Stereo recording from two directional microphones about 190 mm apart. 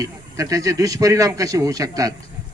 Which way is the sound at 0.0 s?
20° right (ahead or behind).